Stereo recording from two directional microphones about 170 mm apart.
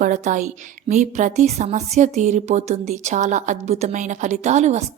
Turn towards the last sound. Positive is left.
turn(degrees=-40)  # may be behind; listen again after turning